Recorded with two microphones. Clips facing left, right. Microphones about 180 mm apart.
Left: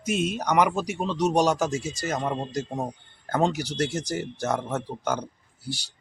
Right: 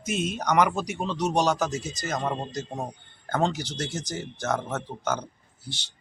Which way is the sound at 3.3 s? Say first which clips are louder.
Left 2 dB; 10° left (ahead or behind).